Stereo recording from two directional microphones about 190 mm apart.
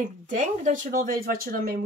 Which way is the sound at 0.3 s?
40° right (ahead or behind).